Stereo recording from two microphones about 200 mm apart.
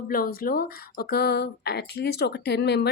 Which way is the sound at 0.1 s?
45° left (ahead or behind).